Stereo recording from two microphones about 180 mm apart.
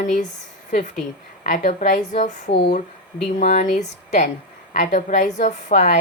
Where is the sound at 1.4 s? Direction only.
50° left (ahead or behind).